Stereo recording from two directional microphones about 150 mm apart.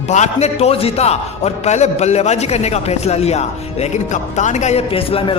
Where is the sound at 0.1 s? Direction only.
50° left (ahead or behind).